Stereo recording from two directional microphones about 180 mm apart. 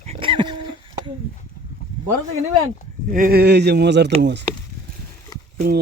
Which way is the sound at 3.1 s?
55° right (ahead or behind).